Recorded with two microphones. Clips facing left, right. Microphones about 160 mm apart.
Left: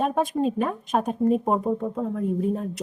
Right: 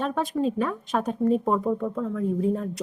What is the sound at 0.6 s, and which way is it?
Speech, 20° left (ahead or behind).